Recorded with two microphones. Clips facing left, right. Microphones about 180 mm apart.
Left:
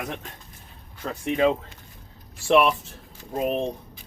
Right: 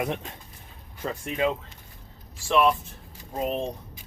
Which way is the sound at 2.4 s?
65° left (ahead or behind).